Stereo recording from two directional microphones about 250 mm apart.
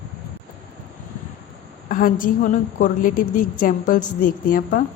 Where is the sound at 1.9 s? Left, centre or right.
Left.